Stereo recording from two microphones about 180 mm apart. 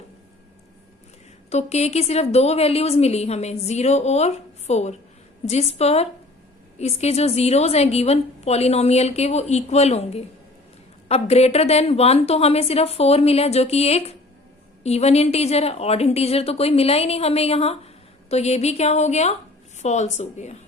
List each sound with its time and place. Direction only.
1.5 s a woman's voice: 40° left (ahead or behind)